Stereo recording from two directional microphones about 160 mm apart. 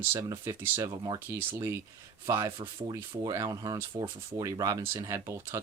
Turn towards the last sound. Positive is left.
turn(degrees=-20)  # may be behind; listen again after turning